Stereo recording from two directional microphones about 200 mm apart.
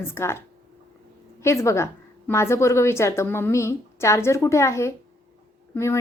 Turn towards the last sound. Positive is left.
turn(degrees=15)  # may be behind; listen again after turning